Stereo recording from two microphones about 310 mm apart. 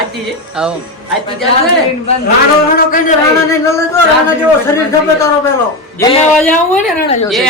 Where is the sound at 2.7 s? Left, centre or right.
Left.